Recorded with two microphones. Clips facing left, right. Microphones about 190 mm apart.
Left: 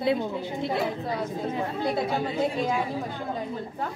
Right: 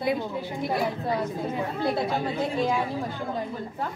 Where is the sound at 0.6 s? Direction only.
25° left (ahead or behind).